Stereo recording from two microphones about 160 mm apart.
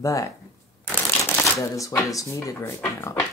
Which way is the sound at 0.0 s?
20° left (ahead or behind).